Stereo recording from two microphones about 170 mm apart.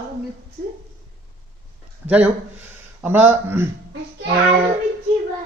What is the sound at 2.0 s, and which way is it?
Speech, 10° right (ahead or behind).